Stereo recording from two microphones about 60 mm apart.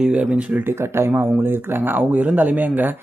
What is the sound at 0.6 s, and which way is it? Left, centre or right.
Speech, right.